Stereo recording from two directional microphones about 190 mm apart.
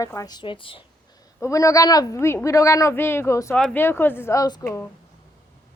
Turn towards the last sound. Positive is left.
turn(degrees=20)  # may be behind; listen again after turning